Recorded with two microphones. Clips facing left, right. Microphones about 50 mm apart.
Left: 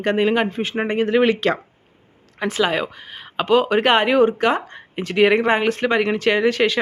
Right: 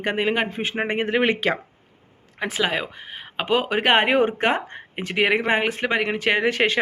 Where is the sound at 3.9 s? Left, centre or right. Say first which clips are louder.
Left 1 dB; right.